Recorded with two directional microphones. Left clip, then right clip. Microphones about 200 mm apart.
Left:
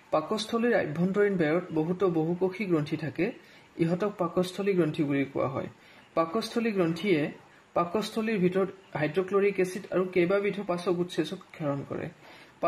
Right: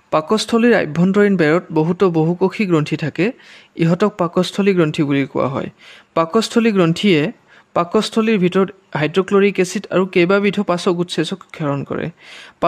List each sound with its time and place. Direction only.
0.1 s speech: 40° right (ahead or behind)